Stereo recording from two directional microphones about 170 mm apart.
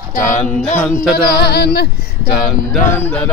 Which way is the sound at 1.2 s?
70° left (ahead or behind).